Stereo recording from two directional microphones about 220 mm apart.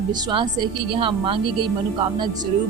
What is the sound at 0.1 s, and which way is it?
A woman's voice, 20° right (ahead or behind).